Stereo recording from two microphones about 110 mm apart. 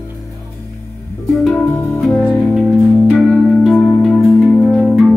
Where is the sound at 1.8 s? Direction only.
20° left (ahead or behind).